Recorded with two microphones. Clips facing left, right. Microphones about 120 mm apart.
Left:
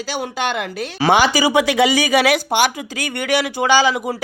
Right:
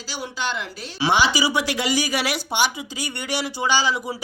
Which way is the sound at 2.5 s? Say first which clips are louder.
Left 5 dB; 55° left (ahead or behind).